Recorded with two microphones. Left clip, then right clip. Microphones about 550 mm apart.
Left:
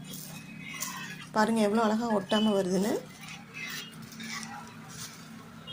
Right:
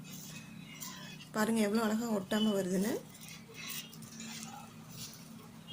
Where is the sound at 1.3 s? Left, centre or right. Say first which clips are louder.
Left 7 dB; right.